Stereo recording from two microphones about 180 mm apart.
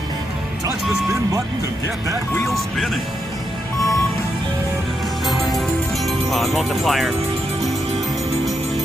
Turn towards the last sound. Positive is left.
turn(degrees=0)  # may be behind; listen again after turning